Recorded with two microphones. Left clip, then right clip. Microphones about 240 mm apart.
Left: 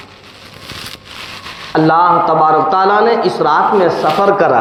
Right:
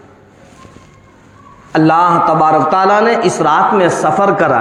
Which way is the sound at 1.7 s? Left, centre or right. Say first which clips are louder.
Even; right.